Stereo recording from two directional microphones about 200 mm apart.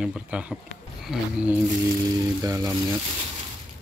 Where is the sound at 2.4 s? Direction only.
15° right (ahead or behind).